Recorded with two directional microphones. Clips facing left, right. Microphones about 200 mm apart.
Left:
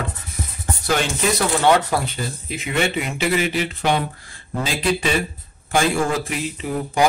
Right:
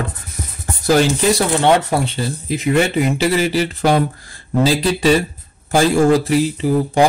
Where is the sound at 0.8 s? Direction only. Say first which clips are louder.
Right 7 dB; 35° right (ahead or behind).